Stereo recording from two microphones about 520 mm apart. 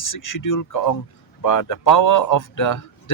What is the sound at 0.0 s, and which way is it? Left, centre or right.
A man's voice, left.